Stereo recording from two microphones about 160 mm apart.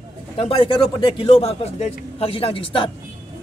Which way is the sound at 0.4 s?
35° left (ahead or behind).